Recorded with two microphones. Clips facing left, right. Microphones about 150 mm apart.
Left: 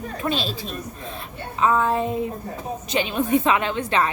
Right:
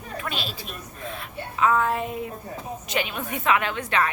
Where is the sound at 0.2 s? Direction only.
30° left (ahead or behind).